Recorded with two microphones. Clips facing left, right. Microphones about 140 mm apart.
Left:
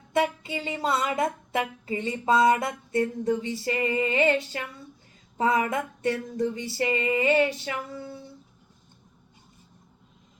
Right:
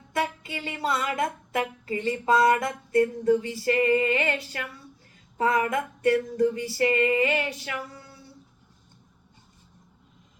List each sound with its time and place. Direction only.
0.1 s speech: 25° left (ahead or behind)